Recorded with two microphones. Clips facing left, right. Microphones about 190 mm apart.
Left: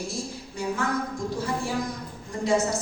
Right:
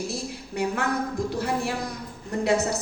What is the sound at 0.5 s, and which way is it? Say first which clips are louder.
Speech: right 2 dB; 65° right (ahead or behind).